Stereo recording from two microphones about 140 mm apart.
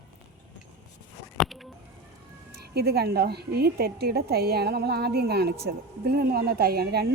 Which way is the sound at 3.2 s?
90° right.